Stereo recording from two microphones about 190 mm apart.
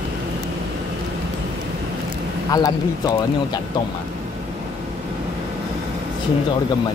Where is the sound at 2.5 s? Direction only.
20° left (ahead or behind).